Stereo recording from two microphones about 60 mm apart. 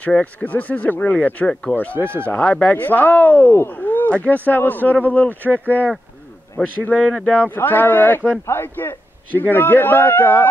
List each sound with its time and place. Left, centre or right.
0.2 s speech: left
1.5 s speech: centre
1.8 s speech: left
2.7 s a man's voice: left